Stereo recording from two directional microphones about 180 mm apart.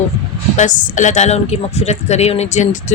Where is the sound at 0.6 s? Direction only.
45° left (ahead or behind).